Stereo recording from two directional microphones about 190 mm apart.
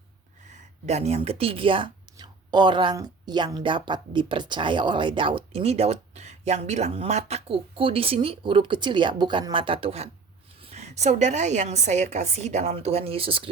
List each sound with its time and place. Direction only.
0.9 s a woman's voice: 35° right (ahead or behind)